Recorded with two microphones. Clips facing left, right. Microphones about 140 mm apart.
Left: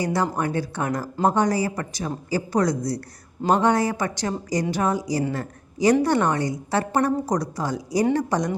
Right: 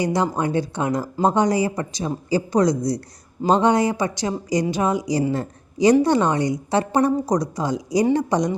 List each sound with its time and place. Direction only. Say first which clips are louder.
0.0 s a woman's voice: right 2 dB; 20° right (ahead or behind)